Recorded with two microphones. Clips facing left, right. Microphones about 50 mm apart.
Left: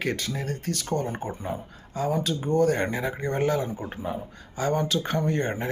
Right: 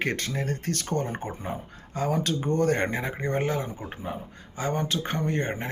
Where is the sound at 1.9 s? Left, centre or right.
Right.